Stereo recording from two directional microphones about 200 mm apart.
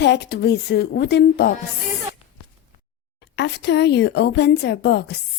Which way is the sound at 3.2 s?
60° left (ahead or behind).